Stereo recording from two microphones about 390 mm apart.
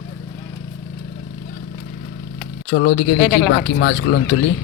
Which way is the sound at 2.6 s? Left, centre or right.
Left.